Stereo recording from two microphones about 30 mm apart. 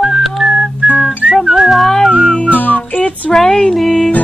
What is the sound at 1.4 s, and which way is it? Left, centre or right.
Music, right.